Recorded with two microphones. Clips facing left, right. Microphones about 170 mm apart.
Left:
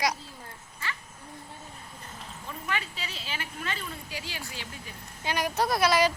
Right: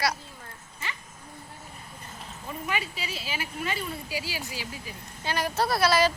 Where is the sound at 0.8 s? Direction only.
20° right (ahead or behind).